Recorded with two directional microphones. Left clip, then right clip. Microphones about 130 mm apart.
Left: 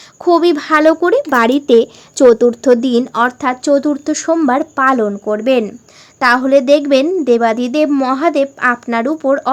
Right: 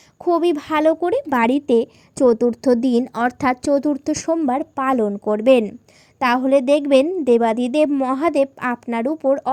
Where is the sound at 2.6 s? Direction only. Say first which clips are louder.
Left 6 dB; 30° right (ahead or behind).